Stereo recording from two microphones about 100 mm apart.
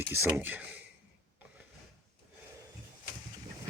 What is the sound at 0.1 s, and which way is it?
Speech, 20° right (ahead or behind).